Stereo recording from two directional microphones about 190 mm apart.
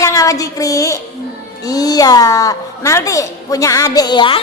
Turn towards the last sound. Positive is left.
turn(degrees=25)  # may be behind; listen again after turning